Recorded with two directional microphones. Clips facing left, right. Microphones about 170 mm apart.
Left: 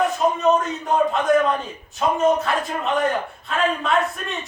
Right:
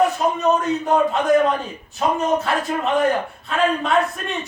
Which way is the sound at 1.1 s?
Centre (ahead or behind).